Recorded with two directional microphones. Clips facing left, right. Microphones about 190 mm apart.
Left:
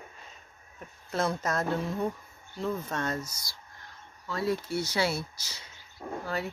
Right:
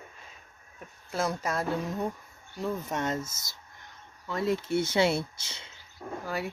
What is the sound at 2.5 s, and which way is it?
Speech, 15° right (ahead or behind).